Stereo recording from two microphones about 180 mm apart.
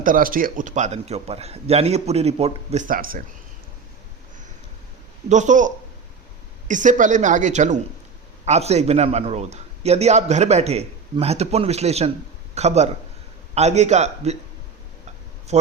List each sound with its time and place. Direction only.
0.0 s a man's voice: 50° right (ahead or behind)
5.3 s a man's voice: 45° right (ahead or behind)
15.5 s a man's voice: 40° right (ahead or behind)